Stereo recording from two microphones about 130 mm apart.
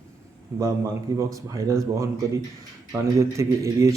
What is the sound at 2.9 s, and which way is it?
A man's voice, 25° right (ahead or behind).